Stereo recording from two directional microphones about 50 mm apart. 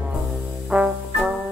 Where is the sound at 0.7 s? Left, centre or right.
Centre.